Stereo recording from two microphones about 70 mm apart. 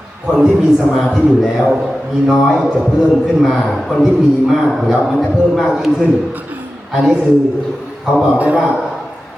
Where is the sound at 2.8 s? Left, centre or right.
Centre.